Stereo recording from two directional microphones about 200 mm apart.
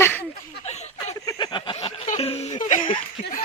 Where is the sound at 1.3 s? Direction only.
20° left (ahead or behind); by 2.9 s 40° left (ahead or behind).